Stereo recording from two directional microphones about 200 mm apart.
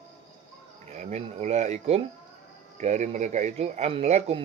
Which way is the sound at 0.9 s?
35° right (ahead or behind).